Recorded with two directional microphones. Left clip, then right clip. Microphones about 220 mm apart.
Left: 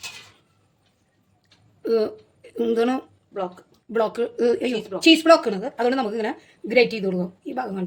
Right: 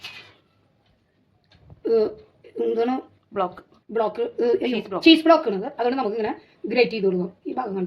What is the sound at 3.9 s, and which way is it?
A woman's voice, 30° left (ahead or behind).